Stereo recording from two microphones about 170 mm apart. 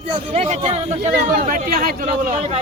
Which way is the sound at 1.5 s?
60° right (ahead or behind).